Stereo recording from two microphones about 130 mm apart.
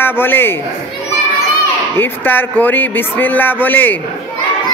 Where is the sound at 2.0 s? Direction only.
15° left (ahead or behind).